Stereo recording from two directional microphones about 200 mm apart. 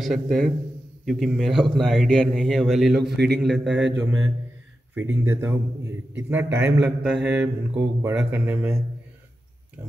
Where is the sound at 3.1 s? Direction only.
55° right (ahead or behind).